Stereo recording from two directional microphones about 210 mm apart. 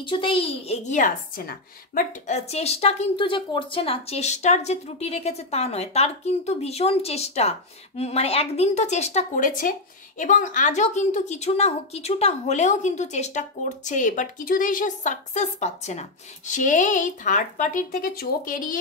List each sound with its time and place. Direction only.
0.0 s speech: 25° left (ahead or behind); by 18.8 s 40° left (ahead or behind)